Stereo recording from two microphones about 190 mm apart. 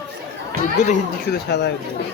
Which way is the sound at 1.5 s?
60° left (ahead or behind).